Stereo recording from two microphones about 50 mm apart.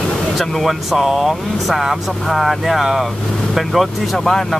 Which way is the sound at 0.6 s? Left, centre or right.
Centre.